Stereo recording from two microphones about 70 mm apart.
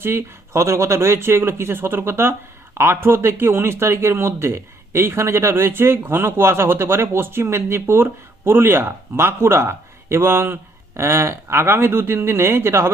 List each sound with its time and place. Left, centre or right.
0.0 s a man's voice: right